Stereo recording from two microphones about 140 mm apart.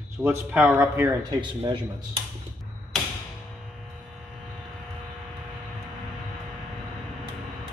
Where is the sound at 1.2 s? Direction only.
35° right (ahead or behind).